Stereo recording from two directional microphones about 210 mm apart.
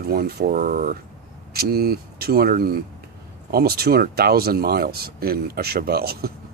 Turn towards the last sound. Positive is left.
turn(degrees=-50)  # may be behind; listen again after turning